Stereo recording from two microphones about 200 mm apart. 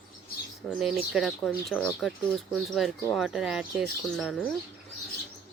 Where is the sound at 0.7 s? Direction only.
5° right (ahead or behind).